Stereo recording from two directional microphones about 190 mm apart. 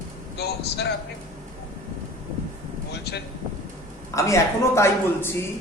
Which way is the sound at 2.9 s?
60° left (ahead or behind).